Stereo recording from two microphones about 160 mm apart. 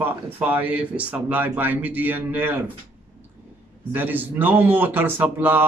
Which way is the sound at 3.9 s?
10° right (ahead or behind).